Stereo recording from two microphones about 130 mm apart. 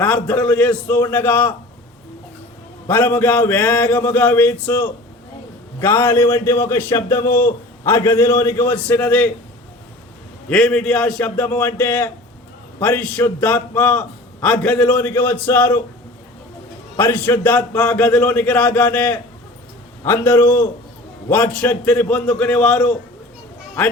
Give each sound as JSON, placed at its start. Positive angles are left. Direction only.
{"t": 0.0, "sound": "a man's voice", "side_deg": 10}
{"t": 2.8, "sound": "a man's voice", "side_deg": 15}
{"t": 10.5, "sound": "a man's voice", "side_deg": 5}
{"t": 17.0, "sound": "a man's voice", "side_deg": 15}